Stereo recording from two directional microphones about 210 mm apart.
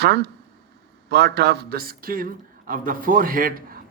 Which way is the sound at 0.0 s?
55° right (ahead or behind).